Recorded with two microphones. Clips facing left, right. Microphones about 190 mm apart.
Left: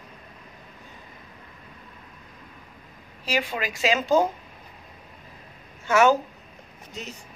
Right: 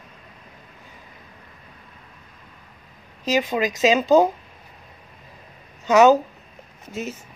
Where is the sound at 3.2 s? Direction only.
20° right (ahead or behind).